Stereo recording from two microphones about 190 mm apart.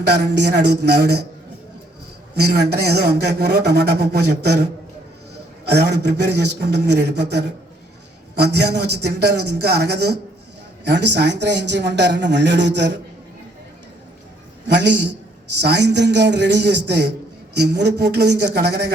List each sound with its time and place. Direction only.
0.0 s a man's voice: 60° right (ahead or behind)
2.3 s a man's voice: 60° right (ahead or behind)
5.6 s a man's voice: 60° right (ahead or behind)
14.7 s a man's voice: 65° right (ahead or behind)